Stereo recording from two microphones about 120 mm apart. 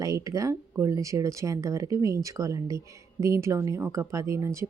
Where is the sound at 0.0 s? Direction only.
30° right (ahead or behind).